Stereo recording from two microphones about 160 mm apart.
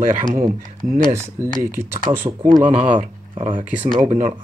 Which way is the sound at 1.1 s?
15° right (ahead or behind).